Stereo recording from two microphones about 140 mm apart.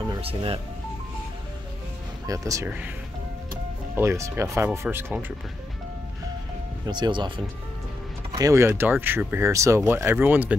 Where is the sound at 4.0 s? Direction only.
20° right (ahead or behind).